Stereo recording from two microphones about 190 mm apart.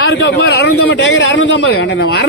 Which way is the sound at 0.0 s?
75° left (ahead or behind).